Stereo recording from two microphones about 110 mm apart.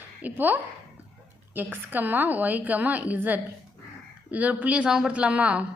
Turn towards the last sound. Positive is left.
turn(degrees=-10)  # may be behind; listen again after turning